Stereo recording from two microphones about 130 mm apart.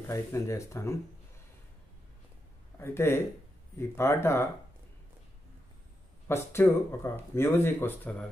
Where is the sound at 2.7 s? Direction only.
20° left (ahead or behind).